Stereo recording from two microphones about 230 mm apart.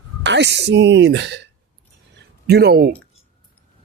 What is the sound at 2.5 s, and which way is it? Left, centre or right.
Speech, right.